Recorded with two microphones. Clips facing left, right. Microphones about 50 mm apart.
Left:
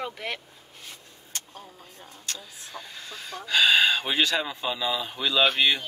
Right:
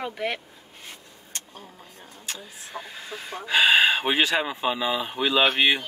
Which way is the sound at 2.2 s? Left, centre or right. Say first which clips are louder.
Right 1 dB; centre.